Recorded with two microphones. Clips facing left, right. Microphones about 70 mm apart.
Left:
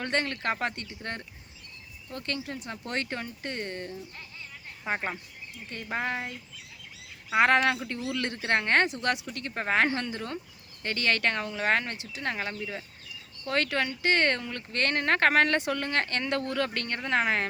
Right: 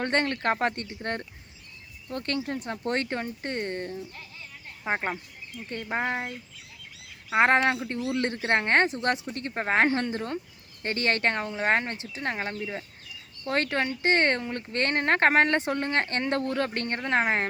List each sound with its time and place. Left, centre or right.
0.0 s speech: right
7.3 s speech: right